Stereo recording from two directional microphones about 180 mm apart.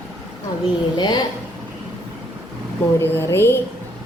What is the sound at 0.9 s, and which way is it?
Speech, 25° left (ahead or behind).